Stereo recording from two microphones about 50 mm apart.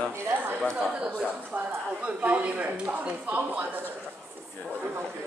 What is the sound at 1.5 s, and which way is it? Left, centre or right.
Speech, right.